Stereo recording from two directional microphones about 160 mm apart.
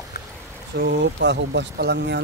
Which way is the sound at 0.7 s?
90° right.